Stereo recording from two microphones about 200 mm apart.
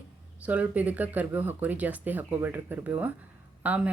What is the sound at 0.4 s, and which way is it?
Speech, 5° right (ahead or behind).